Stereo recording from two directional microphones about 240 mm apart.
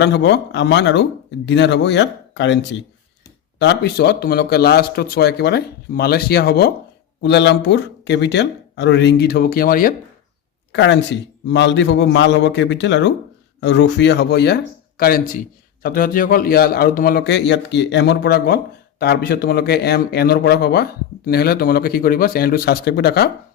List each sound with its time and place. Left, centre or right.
0.0 s speech: left
3.6 s a man's voice: left
10.7 s a man's voice: left